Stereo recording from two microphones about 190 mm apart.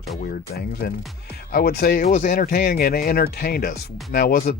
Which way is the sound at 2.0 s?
40° left (ahead or behind).